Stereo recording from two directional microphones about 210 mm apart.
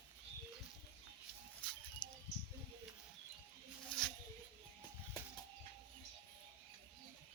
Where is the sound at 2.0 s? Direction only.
20° left (ahead or behind).